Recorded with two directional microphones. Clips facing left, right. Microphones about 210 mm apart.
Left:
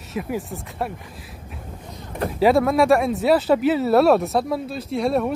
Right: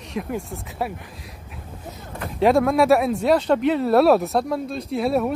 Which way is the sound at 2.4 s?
Centre (ahead or behind).